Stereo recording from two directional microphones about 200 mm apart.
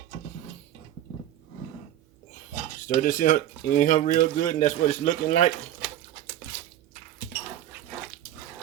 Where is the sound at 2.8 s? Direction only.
45° left (ahead or behind).